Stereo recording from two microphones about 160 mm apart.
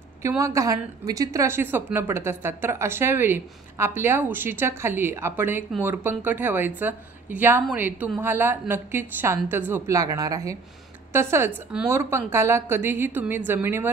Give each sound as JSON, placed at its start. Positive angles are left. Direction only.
{"t": 0.2, "sound": "a woman's voice", "side_deg": -20}